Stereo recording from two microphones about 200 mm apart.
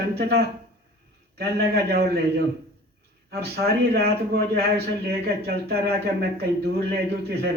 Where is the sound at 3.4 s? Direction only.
50° right (ahead or behind).